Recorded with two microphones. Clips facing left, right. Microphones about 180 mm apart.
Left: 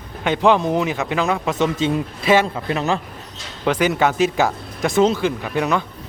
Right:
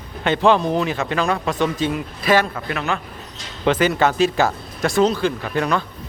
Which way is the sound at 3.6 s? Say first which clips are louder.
Right 1 dB; 10° left (ahead or behind).